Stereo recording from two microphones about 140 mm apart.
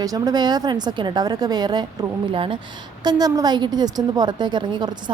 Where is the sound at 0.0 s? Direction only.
25° right (ahead or behind).